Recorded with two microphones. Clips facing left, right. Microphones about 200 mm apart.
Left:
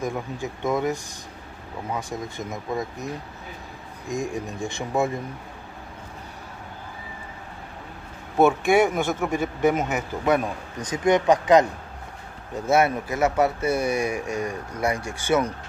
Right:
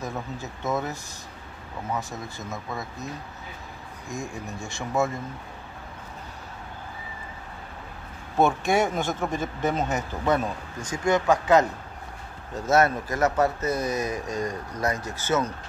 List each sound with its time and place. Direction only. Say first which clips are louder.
0.0 s speech: left 4 dB; 15° left (ahead or behind)
2.3 s speech: left 6 dB; 15° left (ahead or behind)
4.1 s speech: left 6 dB; 15° left (ahead or behind)
8.4 s speech: left 4 dB; 10° left (ahead or behind)